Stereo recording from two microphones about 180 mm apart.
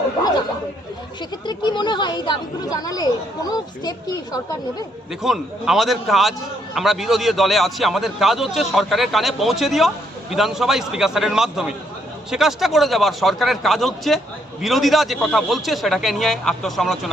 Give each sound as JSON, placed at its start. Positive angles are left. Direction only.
{"t": 1.5, "sound": "speech", "side_deg": 25}
{"t": 5.2, "sound": "a man's voice", "side_deg": 0}